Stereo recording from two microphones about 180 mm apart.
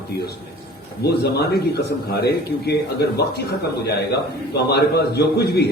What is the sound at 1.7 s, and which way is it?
A man's voice, 65° left (ahead or behind).